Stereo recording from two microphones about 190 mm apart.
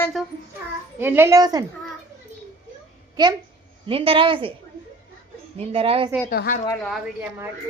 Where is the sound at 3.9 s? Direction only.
30° right (ahead or behind).